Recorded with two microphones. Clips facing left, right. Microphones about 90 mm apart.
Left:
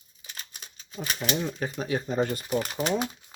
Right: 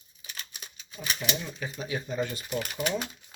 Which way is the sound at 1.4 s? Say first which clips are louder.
Left 6 dB; 40° left (ahead or behind).